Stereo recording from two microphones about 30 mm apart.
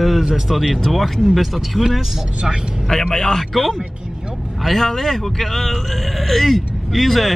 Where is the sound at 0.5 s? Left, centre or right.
Centre.